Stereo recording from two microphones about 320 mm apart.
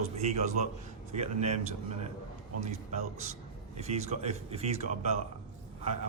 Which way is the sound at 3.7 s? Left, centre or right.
Centre.